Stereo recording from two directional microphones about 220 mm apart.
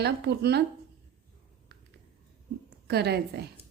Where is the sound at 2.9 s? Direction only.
45° right (ahead or behind).